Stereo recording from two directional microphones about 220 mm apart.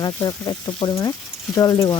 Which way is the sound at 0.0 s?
15° left (ahead or behind).